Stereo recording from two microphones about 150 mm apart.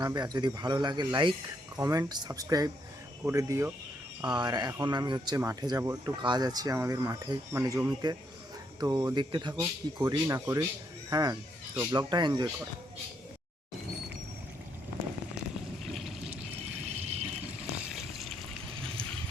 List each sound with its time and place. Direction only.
0.0 s speech: 25° right (ahead or behind)
9.6 s speech: 20° right (ahead or behind)
15.8 s pour: centre (ahead or behind)
17.0 s water: 45° right (ahead or behind)
17.9 s water: centre (ahead or behind)